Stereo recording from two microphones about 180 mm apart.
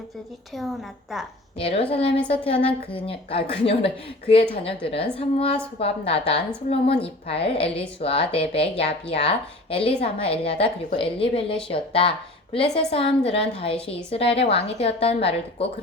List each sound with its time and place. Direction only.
1.5 s a woman's voice: 30° left (ahead or behind)